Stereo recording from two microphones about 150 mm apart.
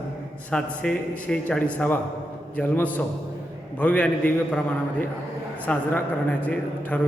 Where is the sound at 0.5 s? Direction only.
5° left (ahead or behind).